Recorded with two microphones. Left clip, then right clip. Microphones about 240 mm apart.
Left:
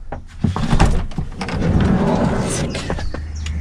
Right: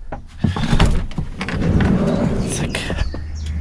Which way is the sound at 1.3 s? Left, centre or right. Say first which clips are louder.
Even; centre.